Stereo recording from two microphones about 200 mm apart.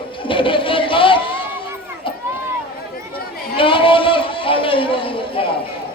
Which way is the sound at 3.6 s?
25° left (ahead or behind).